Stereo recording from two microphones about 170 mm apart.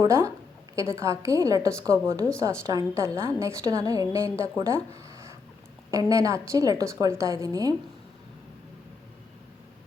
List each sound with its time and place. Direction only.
0.0 s a woman's voice: 15° right (ahead or behind)
4.9 s a sound: 20° right (ahead or behind)
5.9 s a woman's voice: 20° right (ahead or behind)